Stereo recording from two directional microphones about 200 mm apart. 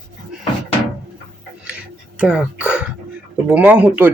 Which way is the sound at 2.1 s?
5° right (ahead or behind).